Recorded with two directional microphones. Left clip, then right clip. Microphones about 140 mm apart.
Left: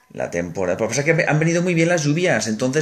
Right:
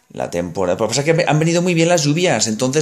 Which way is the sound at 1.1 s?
30° right (ahead or behind).